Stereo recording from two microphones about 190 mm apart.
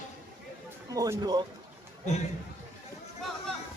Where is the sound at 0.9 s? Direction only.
20° right (ahead or behind).